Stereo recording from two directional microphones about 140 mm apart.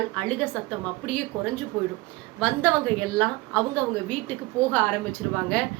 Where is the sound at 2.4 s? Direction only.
10° left (ahead or behind).